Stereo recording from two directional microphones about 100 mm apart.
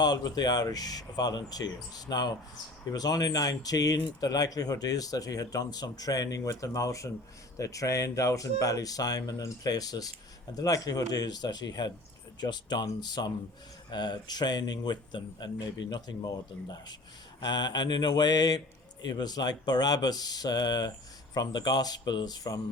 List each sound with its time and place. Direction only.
0.0 s speech: 45° left (ahead or behind)